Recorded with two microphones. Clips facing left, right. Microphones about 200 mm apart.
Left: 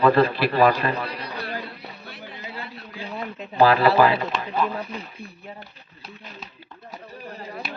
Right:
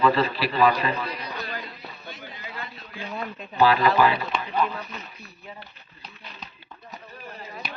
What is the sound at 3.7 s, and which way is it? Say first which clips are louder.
A man's voice: left 3 dB; 35° left (ahead or behind).